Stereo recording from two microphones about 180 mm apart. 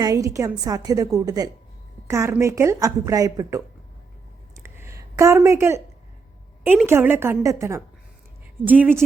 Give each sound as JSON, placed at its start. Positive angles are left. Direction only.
{"t": 0.0, "sound": "a woman's voice", "side_deg": -20}
{"t": 4.5, "sound": "a sound", "side_deg": -15}
{"t": 6.7, "sound": "speech", "side_deg": -10}